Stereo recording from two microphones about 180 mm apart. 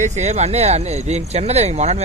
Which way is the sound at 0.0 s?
40° right (ahead or behind).